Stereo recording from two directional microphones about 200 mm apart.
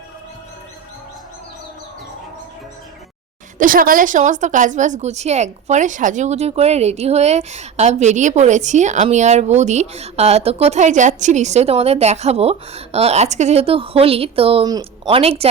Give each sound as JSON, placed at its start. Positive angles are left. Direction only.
{"t": 3.6, "sound": "a woman's voice", "side_deg": -45}